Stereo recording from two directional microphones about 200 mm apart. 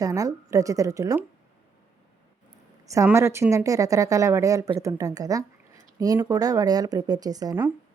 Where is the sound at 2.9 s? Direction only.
15° right (ahead or behind).